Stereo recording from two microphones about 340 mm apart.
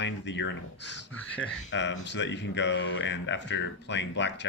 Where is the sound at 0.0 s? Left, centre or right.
Left.